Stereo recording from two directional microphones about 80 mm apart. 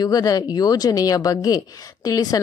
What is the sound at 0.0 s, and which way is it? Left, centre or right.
A woman's voice, left.